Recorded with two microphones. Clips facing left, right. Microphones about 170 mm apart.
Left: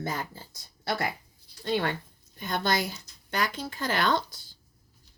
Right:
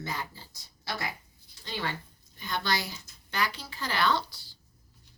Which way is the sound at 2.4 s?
50° left (ahead or behind).